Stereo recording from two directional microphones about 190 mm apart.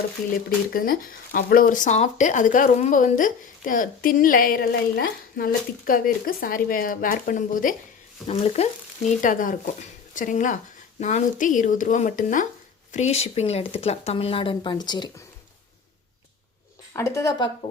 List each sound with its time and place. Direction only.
0.7 s speech: 50° left (ahead or behind)
8.3 s speech: 35° left (ahead or behind)
16.9 s speech: 15° left (ahead or behind)